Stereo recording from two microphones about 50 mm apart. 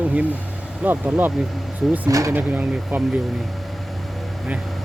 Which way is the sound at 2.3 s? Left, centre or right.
Right.